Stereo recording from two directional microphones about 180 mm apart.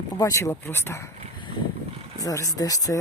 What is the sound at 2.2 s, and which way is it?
Speech, 20° left (ahead or behind).